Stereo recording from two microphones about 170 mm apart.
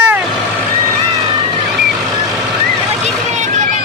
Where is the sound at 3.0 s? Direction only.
45° right (ahead or behind).